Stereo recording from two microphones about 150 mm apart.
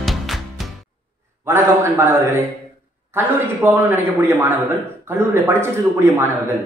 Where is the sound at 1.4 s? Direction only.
15° right (ahead or behind).